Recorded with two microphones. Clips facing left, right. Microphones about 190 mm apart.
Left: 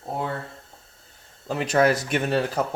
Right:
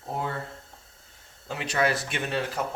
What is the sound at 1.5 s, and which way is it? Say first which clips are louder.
Speech: left 6 dB; 45° left (ahead or behind).